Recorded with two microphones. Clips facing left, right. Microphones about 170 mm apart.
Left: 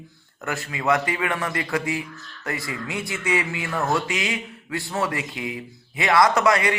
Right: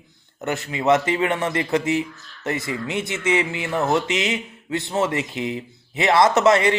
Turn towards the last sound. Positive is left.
turn(degrees=-25)  # may be behind; listen again after turning